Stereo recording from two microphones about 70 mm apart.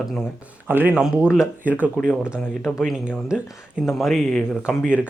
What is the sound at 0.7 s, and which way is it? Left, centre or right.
Speech, right.